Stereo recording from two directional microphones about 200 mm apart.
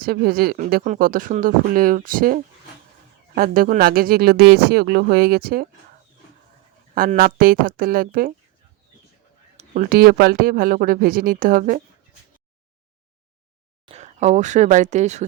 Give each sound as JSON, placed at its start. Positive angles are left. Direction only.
{"t": 0.0, "sound": "speech", "side_deg": -50}
{"t": 6.9, "sound": "speech", "side_deg": -45}
{"t": 9.6, "sound": "speech", "side_deg": -40}
{"t": 13.8, "sound": "speech", "side_deg": -35}